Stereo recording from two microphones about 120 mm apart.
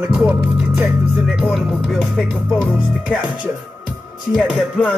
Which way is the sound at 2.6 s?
10° right (ahead or behind).